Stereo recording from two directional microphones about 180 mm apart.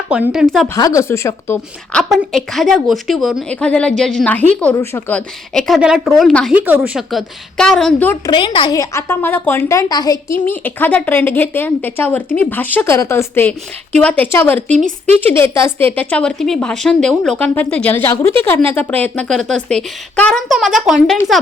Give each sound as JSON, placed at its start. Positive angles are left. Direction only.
{"t": 0.1, "sound": "a woman's voice", "side_deg": -5}
{"t": 0.8, "sound": "a woman's voice", "side_deg": 20}
{"t": 8.3, "sound": "a woman's voice", "side_deg": 25}
{"t": 10.5, "sound": "a woman's voice", "side_deg": 10}